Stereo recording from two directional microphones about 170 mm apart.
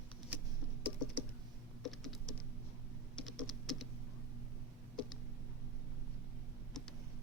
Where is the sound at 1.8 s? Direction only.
Centre (ahead or behind).